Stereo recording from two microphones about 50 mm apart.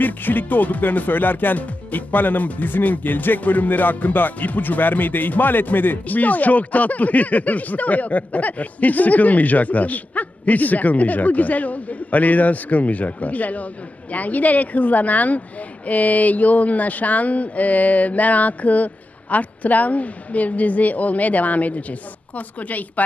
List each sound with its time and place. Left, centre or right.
0.0 s speech: left